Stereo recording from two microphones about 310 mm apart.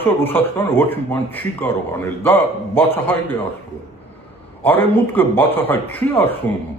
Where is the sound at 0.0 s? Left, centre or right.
Centre.